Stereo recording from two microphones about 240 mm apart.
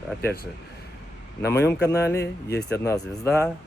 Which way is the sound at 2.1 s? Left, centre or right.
Left.